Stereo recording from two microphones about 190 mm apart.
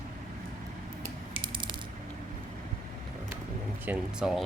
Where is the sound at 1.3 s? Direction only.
25° right (ahead or behind).